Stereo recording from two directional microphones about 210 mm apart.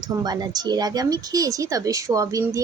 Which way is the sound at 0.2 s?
20° right (ahead or behind).